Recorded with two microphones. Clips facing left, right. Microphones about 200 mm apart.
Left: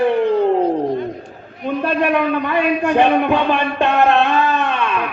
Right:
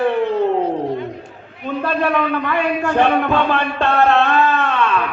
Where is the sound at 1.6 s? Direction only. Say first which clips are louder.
Left 2 dB; 15° left (ahead or behind).